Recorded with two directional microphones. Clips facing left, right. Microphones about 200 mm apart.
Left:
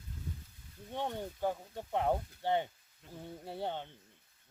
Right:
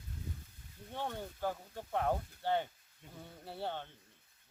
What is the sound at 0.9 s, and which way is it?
Speech, 15° left (ahead or behind).